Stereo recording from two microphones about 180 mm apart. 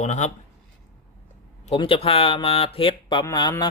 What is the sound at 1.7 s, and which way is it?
Speech, 30° left (ahead or behind).